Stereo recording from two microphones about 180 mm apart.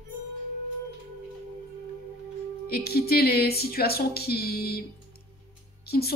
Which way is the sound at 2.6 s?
60° left (ahead or behind).